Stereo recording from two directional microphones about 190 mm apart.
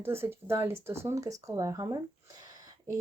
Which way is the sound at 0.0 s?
10° right (ahead or behind).